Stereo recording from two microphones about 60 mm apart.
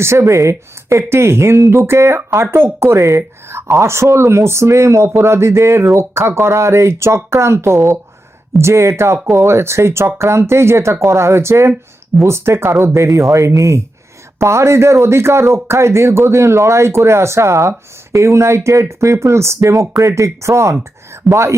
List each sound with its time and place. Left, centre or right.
0.0 s speech: right
13.3 s speech: right
21.1 s a sound: right